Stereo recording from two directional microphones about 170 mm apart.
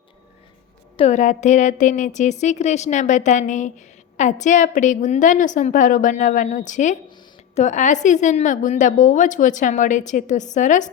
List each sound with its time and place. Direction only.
0.9 s a woman's voice: 40° left (ahead or behind)